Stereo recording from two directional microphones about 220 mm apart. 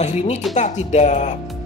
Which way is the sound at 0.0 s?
30° left (ahead or behind).